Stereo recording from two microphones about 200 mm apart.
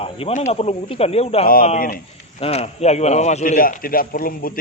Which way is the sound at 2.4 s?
30° left (ahead or behind).